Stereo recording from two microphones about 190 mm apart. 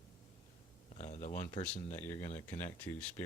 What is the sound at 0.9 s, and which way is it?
Speech, 40° left (ahead or behind).